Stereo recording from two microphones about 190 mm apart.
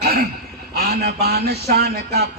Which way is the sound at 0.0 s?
55° right (ahead or behind).